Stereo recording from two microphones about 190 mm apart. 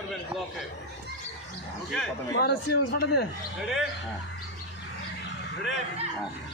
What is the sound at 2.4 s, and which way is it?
Speech, 60° left (ahead or behind).